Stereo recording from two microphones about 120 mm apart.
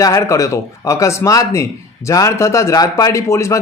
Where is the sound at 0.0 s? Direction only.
25° left (ahead or behind).